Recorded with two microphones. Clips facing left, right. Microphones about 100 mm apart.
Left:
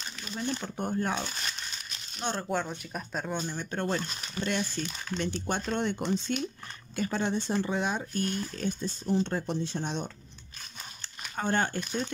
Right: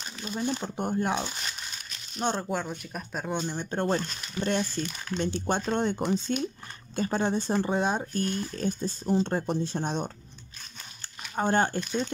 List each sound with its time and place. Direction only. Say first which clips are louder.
0.3 s speech: right 3 dB; 15° right (ahead or behind)
3.4 s speech: right 4 dB; 25° right (ahead or behind)